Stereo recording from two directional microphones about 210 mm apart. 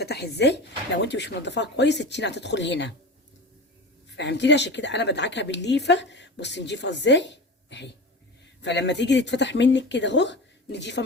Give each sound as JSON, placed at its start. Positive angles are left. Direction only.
{"t": 0.0, "sound": "a woman's voice", "side_deg": 50}
{"t": 4.1, "sound": "a woman's voice", "side_deg": 55}